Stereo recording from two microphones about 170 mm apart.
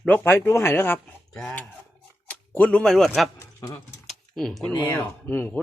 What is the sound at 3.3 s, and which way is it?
Speech, 15° left (ahead or behind).